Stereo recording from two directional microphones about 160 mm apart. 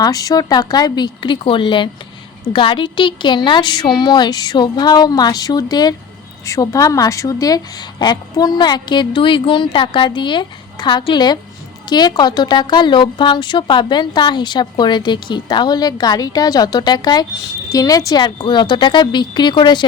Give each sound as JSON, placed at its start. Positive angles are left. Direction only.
{"t": 0.0, "sound": "a woman's voice", "side_deg": 25}